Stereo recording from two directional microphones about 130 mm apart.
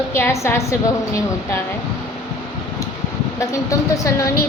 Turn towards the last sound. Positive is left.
turn(degrees=25)  # may be behind; listen again after turning